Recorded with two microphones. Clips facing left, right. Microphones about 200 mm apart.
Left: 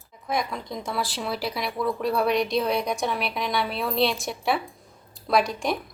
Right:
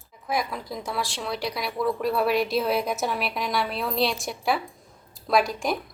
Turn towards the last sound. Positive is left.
turn(degrees=0)  # may be behind; listen again after turning